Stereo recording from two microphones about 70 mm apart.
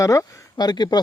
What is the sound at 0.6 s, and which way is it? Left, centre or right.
Speech, left.